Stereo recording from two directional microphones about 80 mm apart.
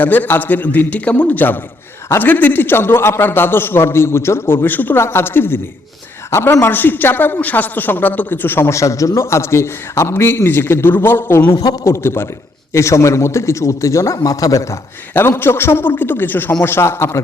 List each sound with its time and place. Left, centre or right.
0.0 s a man's voice: left
11.4 s speech: left
11.9 s a man's voice: left
15.1 s a man's voice: left